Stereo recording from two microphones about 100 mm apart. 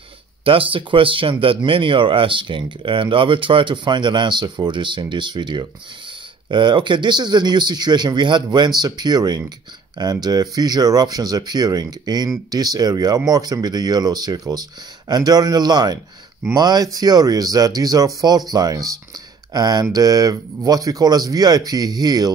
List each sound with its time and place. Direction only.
0.4 s speech: 65° right (ahead or behind); by 22.3 s 40° right (ahead or behind)